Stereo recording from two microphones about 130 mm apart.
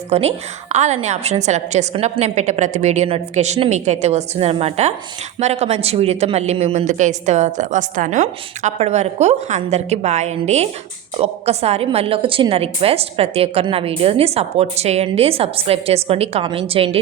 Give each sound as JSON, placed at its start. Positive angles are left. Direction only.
{"t": 0.1, "sound": "a woman's voice", "side_deg": -55}